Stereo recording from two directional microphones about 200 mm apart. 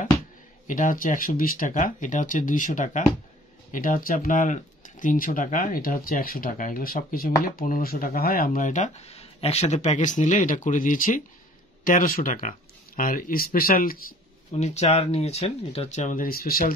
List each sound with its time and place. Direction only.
0.7 s speech: 40° left (ahead or behind)
14.5 s speech: 35° left (ahead or behind)